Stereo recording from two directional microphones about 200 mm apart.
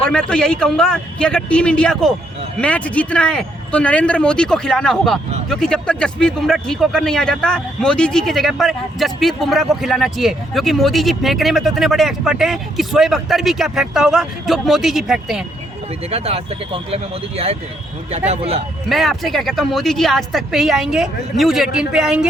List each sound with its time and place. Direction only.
0.0 s speech: 5° left (ahead or behind)
16.0 s speech: 30° right (ahead or behind)
18.9 s speech: centre (ahead or behind)